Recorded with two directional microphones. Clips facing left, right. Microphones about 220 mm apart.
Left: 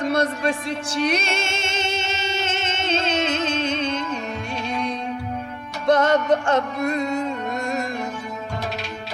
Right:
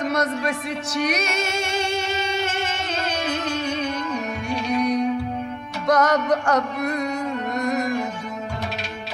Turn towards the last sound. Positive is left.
turn(degrees=25)  # may be behind; listen again after turning